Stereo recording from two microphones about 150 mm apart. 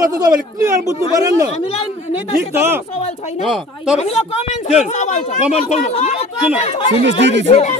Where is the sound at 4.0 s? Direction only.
45° left (ahead or behind).